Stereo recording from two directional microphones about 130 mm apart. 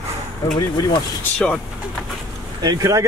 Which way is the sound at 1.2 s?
5° left (ahead or behind).